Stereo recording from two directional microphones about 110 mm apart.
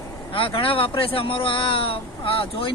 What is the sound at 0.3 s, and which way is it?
Speech, 55° left (ahead or behind).